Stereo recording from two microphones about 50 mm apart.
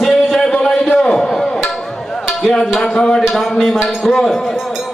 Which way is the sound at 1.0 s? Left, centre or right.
Centre.